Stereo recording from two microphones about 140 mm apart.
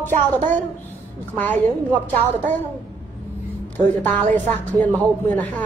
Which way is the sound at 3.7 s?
10° left (ahead or behind).